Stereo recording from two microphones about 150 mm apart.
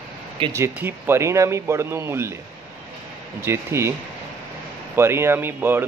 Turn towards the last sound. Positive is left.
turn(degrees=-15)  # may be behind; listen again after turning